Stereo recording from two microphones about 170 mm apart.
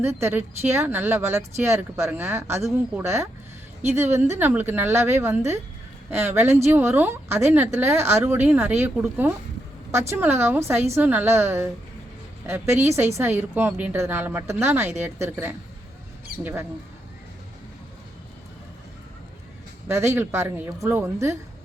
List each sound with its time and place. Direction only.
0.0 s a woman's voice: 15° right (ahead or behind)
19.9 s a woman's voice: 15° right (ahead or behind)